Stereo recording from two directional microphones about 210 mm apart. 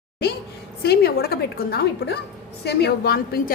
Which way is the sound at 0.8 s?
50° left (ahead or behind).